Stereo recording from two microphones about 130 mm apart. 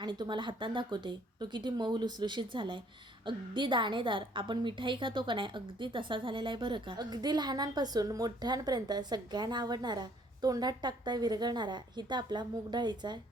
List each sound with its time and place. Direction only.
0.0 s a woman's voice: 35° right (ahead or behind)